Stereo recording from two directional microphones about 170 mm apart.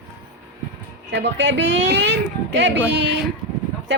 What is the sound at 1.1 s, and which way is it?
A woman's voice, 90° right.